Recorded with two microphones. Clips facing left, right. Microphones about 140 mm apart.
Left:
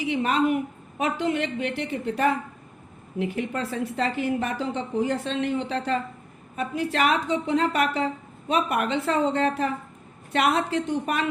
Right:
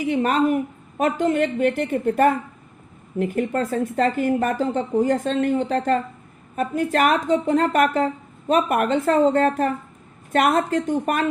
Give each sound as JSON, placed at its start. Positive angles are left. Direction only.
{"t": 0.0, "sound": "a woman's voice", "side_deg": -45}